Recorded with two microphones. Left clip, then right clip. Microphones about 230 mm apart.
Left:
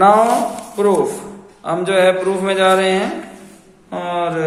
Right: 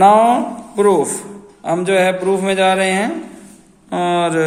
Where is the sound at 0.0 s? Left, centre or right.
Right.